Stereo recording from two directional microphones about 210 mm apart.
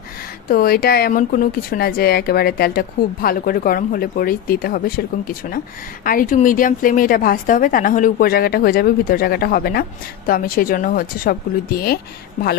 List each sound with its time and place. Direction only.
0.5 s a woman's voice: 45° left (ahead or behind)